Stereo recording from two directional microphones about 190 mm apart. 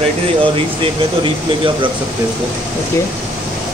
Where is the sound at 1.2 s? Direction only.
25° right (ahead or behind).